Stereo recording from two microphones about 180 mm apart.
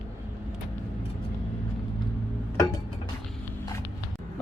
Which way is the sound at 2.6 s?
25° left (ahead or behind).